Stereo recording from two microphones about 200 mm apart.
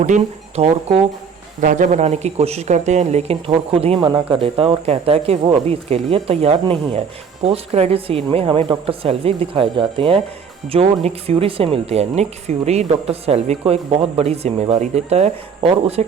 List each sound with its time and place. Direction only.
0.0 s speech: 35° right (ahead or behind)